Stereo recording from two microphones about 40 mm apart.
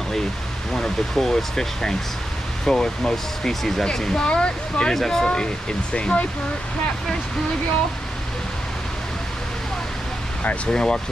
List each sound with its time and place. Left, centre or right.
0.7 s speech: centre
4.9 s speech: centre
5.3 s speech: left
10.7 s speech: left